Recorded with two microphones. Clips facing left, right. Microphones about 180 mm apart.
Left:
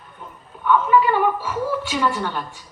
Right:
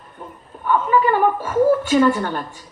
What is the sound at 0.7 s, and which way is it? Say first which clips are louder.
A man's voice: even; 45° right (ahead or behind).